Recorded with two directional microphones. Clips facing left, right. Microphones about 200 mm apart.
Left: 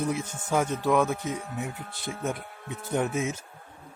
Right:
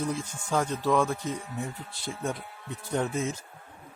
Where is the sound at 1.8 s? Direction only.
55° left (ahead or behind).